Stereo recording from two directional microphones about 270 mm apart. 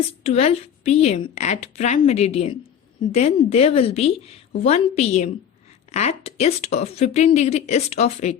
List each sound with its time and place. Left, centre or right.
0.2 s speech: left